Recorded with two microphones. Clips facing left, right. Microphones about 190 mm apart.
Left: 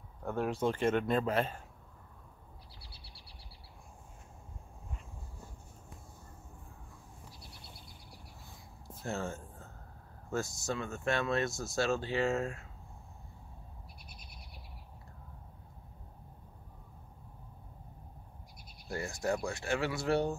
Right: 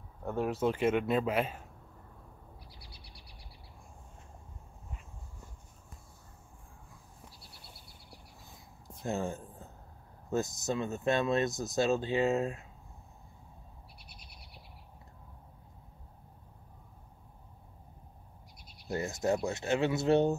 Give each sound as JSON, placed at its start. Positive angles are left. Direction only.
{"t": 0.2, "sound": "speech", "side_deg": -5}
{"t": 2.8, "sound": "bird", "side_deg": -15}
{"t": 9.0, "sound": "speech", "side_deg": -15}
{"t": 18.9, "sound": "speech", "side_deg": -20}